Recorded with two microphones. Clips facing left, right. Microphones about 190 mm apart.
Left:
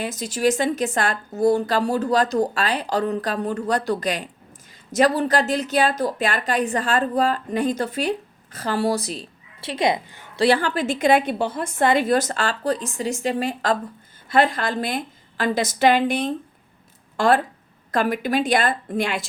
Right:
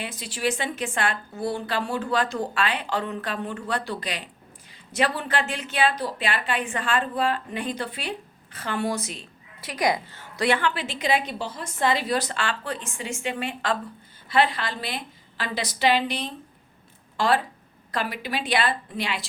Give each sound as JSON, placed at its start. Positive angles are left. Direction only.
{"t": 0.0, "sound": "a woman's voice", "side_deg": 45}
{"t": 10.3, "sound": "a woman's voice", "side_deg": 35}